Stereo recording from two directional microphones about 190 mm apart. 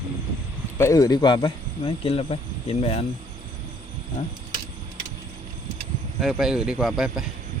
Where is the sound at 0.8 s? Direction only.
15° left (ahead or behind); by 3.0 s 30° left (ahead or behind).